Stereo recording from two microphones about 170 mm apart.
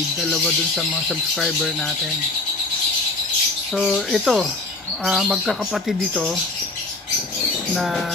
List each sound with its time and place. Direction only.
0.2 s speech: centre (ahead or behind)
3.7 s speech: centre (ahead or behind)
7.7 s speech: centre (ahead or behind)